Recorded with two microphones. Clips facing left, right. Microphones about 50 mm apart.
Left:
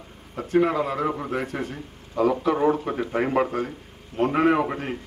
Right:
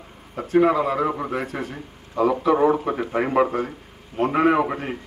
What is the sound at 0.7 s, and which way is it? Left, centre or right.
A man's voice, centre.